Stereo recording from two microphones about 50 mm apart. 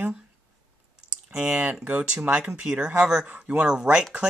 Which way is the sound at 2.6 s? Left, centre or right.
Centre.